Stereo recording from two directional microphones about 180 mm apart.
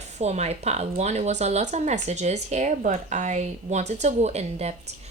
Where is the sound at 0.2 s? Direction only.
40° right (ahead or behind).